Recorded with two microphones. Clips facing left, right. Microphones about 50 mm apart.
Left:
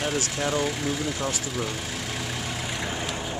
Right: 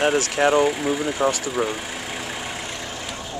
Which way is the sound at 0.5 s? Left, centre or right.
Centre.